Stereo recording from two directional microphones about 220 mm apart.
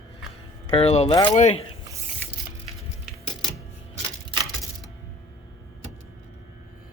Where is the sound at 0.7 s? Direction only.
30° left (ahead or behind).